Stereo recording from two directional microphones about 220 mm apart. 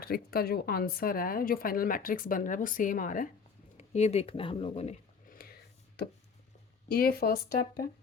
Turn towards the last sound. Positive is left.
turn(degrees=40)  # may be behind; listen again after turning